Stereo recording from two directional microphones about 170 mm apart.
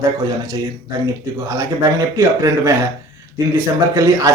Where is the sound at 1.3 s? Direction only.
20° right (ahead or behind).